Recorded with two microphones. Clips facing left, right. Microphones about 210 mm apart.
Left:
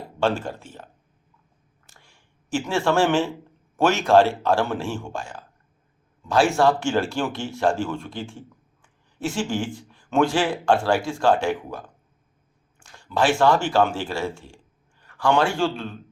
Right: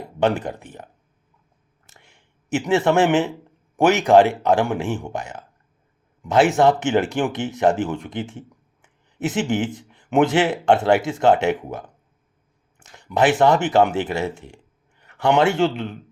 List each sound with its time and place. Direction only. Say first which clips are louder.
0.2 s speech: right 3 dB; 20° right (ahead or behind)
1.9 s a sound: right 3 dB; 20° right (ahead or behind)
3.8 s speech: right 3 dB; 15° right (ahead or behind)